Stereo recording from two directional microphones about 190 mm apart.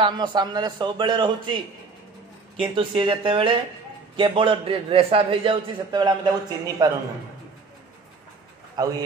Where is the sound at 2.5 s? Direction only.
25° right (ahead or behind).